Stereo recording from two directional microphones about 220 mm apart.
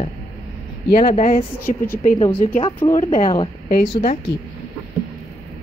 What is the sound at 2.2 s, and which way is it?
Speech, 10° left (ahead or behind).